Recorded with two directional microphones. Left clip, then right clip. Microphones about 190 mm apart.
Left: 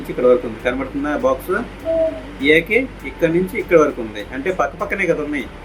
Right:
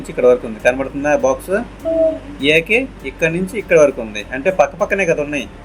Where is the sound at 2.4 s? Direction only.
55° right (ahead or behind).